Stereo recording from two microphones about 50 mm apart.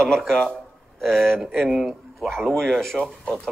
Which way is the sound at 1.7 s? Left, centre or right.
Centre.